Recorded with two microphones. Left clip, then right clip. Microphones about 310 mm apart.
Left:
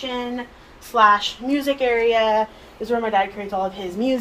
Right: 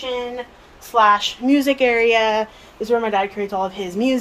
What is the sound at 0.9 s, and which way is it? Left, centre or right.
A woman's voice, right.